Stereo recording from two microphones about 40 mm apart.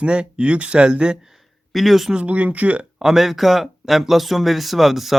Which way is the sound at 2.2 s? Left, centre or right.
Right.